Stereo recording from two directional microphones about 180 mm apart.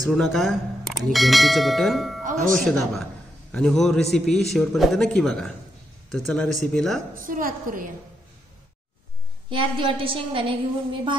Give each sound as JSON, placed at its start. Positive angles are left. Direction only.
{"t": 0.0, "sound": "speech", "side_deg": 0}
{"t": 7.2, "sound": "a woman's voice", "side_deg": -50}
{"t": 9.5, "sound": "a woman's voice", "side_deg": -30}